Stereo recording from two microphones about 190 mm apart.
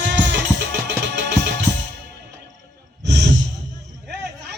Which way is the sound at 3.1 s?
65° right (ahead or behind).